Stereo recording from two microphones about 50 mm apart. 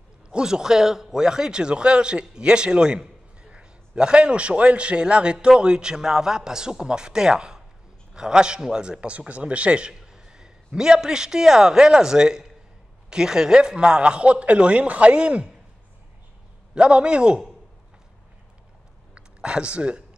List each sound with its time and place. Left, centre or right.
0.3 s a man's voice: centre
16.7 s a man's voice: right
19.1 s speech: right